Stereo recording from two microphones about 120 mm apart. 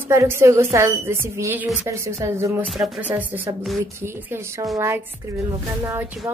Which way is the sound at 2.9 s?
15° right (ahead or behind).